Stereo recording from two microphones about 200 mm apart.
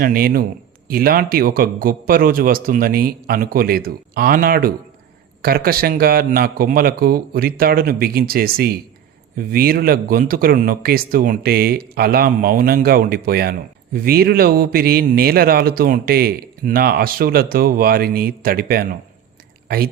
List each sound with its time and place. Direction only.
0.0 s speech: 45° right (ahead or behind)